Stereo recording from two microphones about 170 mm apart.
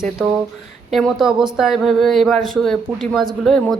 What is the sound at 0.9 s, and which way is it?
Speech, centre (ahead or behind).